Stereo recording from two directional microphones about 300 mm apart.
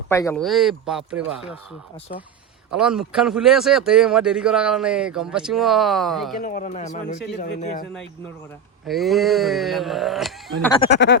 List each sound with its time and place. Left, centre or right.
0.1 s speech: centre
2.7 s speech: centre
6.4 s speech: left
8.9 s speech: centre
10.8 s speech: left